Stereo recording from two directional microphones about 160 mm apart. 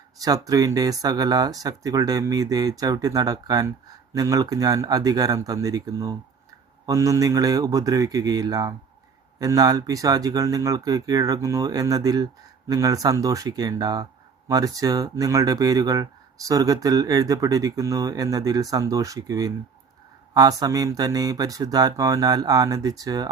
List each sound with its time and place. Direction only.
0.4 s speech: 20° right (ahead or behind)